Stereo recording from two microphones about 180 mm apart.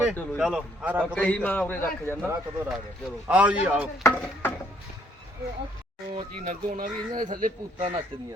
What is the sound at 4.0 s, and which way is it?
Speech, 10° left (ahead or behind).